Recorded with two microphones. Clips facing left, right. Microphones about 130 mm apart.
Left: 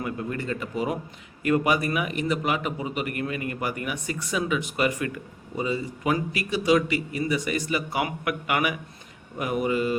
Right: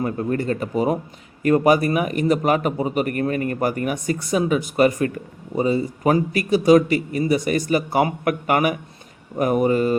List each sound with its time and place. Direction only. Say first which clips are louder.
0.0 s speech: right 7 dB; 40° right (ahead or behind)